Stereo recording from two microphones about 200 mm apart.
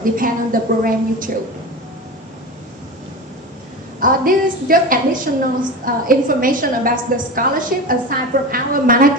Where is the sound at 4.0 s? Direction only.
45° right (ahead or behind).